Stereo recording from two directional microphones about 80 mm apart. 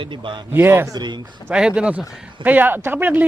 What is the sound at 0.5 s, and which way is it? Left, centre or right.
Speech, right.